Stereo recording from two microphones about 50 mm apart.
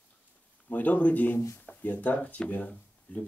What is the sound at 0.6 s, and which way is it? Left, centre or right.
Speech, left.